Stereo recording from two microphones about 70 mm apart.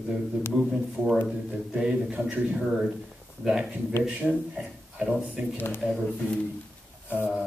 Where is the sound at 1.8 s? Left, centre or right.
Centre.